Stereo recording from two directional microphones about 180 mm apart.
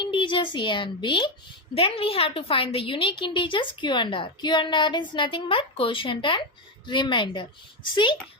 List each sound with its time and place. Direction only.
0.0 s a woman's voice: 30° left (ahead or behind)